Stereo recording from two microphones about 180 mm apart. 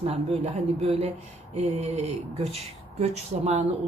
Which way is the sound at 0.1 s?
35° right (ahead or behind).